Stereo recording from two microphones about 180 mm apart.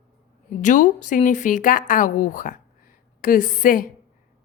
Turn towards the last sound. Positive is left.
turn(degrees=50)  # may be behind; listen again after turning